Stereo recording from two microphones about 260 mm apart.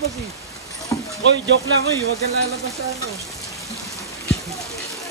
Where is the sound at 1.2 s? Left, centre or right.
Right.